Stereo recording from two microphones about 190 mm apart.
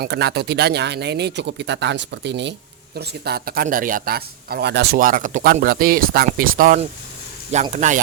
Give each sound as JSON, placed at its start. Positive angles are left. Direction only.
{"t": 0.0, "sound": "speech", "side_deg": -60}